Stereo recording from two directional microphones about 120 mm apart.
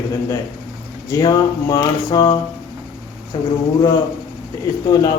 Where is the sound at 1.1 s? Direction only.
35° left (ahead or behind).